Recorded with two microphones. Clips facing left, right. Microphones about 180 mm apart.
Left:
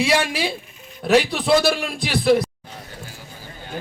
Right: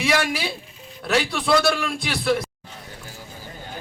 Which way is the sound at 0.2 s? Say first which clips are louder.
Left 2 dB; 30° left (ahead or behind).